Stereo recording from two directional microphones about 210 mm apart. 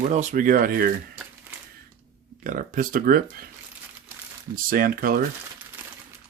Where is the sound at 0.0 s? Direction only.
35° right (ahead or behind).